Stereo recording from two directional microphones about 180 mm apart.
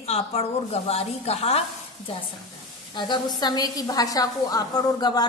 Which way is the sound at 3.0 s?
25° left (ahead or behind).